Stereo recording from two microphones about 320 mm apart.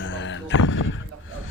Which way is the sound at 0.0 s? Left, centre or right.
Left.